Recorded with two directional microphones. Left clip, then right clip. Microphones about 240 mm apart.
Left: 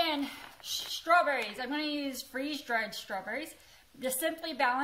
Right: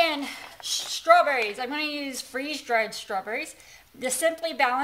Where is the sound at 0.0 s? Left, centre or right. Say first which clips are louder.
Right 7 dB; right.